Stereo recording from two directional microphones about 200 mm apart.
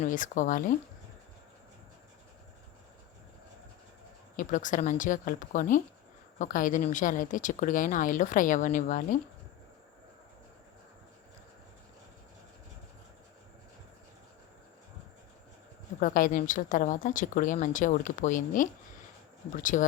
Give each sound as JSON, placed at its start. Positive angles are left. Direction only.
{"t": 0.0, "sound": "a woman's voice", "side_deg": 40}
{"t": 4.4, "sound": "a woman's voice", "side_deg": 40}
{"t": 16.0, "sound": "a woman's voice", "side_deg": 40}